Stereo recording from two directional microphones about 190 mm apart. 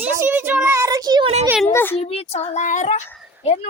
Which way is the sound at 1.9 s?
30° left (ahead or behind).